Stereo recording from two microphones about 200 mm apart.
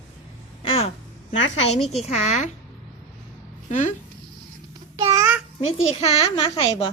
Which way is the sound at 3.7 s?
40° left (ahead or behind).